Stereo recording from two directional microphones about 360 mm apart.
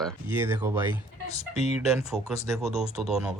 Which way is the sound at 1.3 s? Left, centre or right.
Centre.